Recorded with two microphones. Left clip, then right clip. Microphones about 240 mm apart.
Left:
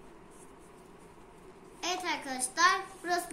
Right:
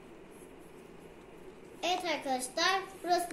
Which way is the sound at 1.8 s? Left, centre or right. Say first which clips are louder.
Right 1 dB; centre.